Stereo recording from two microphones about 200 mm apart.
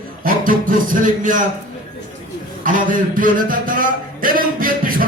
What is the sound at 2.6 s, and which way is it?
Speech, 40° right (ahead or behind).